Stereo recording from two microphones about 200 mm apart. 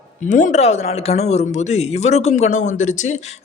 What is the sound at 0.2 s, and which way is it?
Speech, 40° left (ahead or behind).